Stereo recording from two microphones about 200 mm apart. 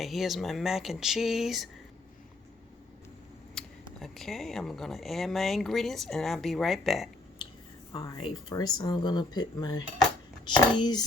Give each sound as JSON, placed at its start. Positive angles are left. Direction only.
{"t": 0.0, "sound": "speech", "side_deg": 0}
{"t": 3.6, "sound": "a sound", "side_deg": 5}
{"t": 4.0, "sound": "speech", "side_deg": 0}
{"t": 7.9, "sound": "speech", "side_deg": 20}